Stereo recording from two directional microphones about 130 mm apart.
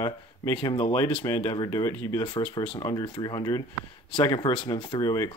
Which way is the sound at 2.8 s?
30° left (ahead or behind).